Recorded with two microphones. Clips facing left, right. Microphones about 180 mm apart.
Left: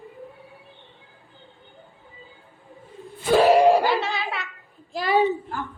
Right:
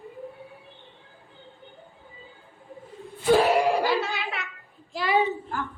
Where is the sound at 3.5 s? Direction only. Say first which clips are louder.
Left 7 dB; 20° left (ahead or behind).